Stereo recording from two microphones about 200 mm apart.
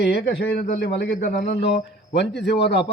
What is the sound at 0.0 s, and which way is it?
A man's voice, 55° left (ahead or behind).